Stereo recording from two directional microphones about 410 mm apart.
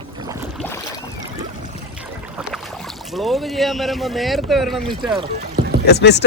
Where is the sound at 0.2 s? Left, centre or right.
Centre.